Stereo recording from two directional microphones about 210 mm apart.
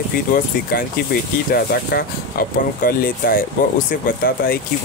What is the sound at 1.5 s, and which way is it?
Speech, 50° left (ahead or behind).